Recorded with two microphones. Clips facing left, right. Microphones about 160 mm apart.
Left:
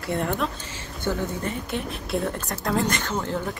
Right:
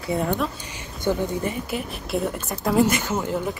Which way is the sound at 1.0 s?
10° right (ahead or behind).